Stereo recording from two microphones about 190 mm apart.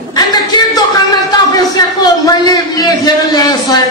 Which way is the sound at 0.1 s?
20° left (ahead or behind).